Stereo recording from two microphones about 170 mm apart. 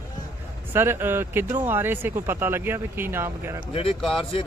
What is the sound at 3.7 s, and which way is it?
Speech, 35° left (ahead or behind).